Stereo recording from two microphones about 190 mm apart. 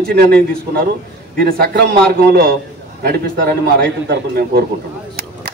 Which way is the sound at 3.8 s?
55° right (ahead or behind).